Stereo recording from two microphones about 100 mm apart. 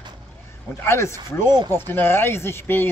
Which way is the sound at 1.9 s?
25° left (ahead or behind).